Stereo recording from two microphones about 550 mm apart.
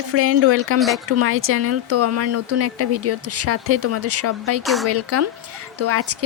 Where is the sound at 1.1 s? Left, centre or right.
Right.